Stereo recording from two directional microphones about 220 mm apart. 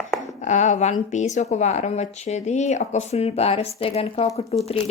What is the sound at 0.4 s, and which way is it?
Speech, 30° left (ahead or behind).